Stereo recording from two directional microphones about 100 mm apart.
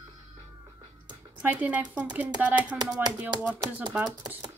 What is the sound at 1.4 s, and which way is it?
Speech, 15° right (ahead or behind).